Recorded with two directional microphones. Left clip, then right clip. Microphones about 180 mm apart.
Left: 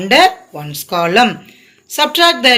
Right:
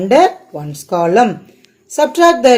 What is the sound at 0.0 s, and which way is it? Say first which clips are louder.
Speech: even; 45° right (ahead or behind).